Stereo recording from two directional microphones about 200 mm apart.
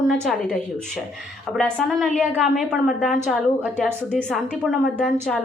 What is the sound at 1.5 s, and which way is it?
A woman's voice, centre (ahead or behind).